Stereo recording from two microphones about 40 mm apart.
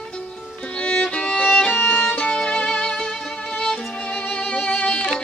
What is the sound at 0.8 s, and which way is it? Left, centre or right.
Violin, left.